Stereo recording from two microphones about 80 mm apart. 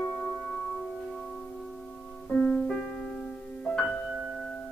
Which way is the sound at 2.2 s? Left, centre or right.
Centre.